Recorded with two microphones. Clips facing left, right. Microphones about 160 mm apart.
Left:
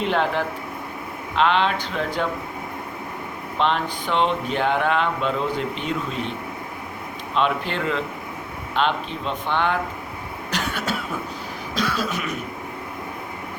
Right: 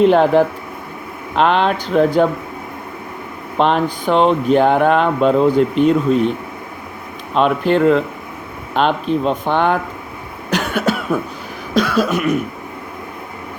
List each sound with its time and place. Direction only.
0.0 s speech: 45° right (ahead or behind)
3.6 s speech: 45° right (ahead or behind)
7.3 s speech: 45° right (ahead or behind)
10.5 s cough: 50° right (ahead or behind)